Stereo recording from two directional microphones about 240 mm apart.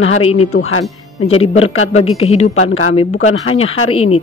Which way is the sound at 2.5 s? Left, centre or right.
Left.